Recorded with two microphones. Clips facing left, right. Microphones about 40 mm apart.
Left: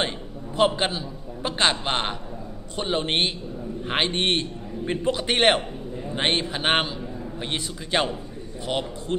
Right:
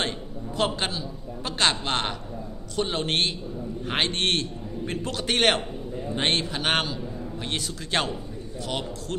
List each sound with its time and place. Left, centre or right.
0.0 s a man's voice: centre